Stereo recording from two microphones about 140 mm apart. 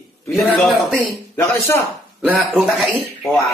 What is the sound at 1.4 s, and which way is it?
Speech, 20° left (ahead or behind).